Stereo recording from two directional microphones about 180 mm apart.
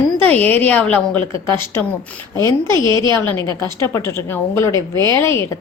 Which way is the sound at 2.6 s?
25° right (ahead or behind).